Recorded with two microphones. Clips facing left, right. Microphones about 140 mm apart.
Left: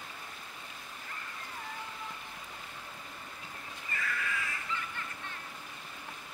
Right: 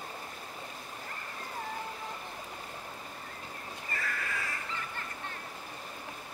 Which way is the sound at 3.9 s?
40° right (ahead or behind).